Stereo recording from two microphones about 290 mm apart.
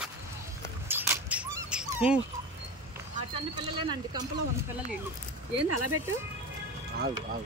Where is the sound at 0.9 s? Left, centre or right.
Centre.